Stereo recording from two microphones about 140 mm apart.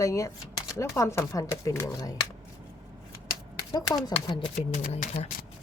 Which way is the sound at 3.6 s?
25° left (ahead or behind).